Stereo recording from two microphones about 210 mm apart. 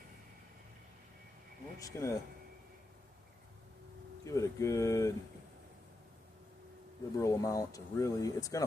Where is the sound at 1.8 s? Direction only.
15° left (ahead or behind).